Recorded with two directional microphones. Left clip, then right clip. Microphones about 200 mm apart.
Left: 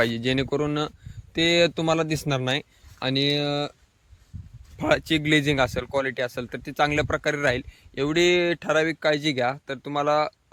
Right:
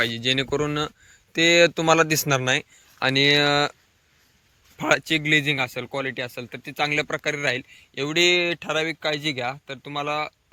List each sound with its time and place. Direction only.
0.0 s speech: 20° left (ahead or behind); by 3.7 s centre (ahead or behind)
4.8 s speech: 10° left (ahead or behind)